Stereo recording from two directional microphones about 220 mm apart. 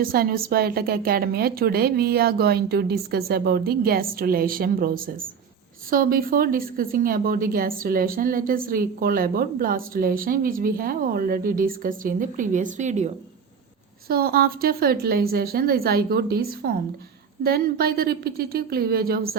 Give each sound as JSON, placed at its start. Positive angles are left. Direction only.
{"t": 0.0, "sound": "a woman's voice", "side_deg": -40}
{"t": 14.1, "sound": "a woman's voice", "side_deg": -45}